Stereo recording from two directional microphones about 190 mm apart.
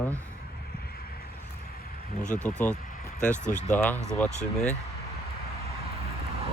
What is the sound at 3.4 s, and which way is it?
Speech, 40° left (ahead or behind).